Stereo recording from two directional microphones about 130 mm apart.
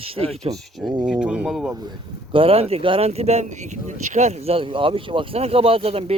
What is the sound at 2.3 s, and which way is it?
Speech, 45° right (ahead or behind).